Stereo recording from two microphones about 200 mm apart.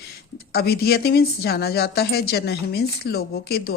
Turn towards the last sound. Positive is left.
turn(degrees=50)  # may be behind; listen again after turning